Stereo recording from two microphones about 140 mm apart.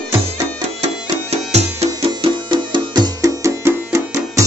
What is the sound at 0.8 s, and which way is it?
Music, 50° right (ahead or behind).